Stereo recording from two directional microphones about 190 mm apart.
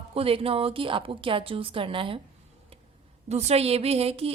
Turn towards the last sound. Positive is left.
turn(degrees=-30)  # may be behind; listen again after turning